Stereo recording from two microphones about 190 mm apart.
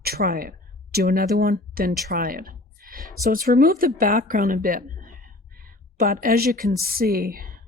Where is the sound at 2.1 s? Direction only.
50° right (ahead or behind).